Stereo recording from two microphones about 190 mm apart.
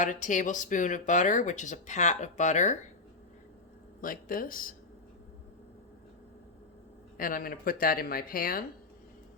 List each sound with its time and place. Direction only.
0.0 s speech: 40° left (ahead or behind)
4.0 s speech: 45° left (ahead or behind)
7.2 s speech: 50° left (ahead or behind)